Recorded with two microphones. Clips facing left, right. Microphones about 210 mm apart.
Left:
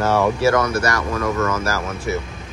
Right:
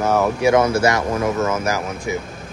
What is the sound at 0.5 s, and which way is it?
Speech, 25° right (ahead or behind).